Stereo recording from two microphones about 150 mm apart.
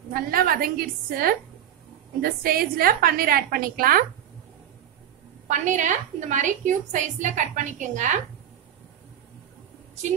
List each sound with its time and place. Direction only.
0.1 s a woman's voice: 75° right (ahead or behind)
5.5 s a woman's voice: 55° right (ahead or behind)